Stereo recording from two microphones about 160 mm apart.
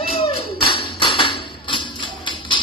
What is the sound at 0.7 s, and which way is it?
Music, 30° left (ahead or behind).